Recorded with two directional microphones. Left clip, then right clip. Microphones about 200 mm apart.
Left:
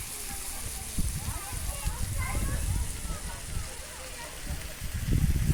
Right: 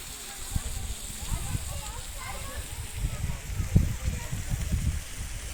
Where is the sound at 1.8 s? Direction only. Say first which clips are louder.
Left 1 dB; 35° left (ahead or behind).